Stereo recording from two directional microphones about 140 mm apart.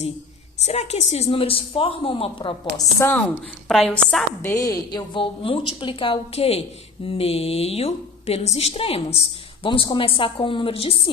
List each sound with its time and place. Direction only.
0.6 s a woman's voice: 50° left (ahead or behind)
3.0 s speech: 15° left (ahead or behind)
3.7 s a woman's voice: 5° left (ahead or behind)
4.4 s a woman's voice: 25° left (ahead or behind); by 11.1 s 40° left (ahead or behind)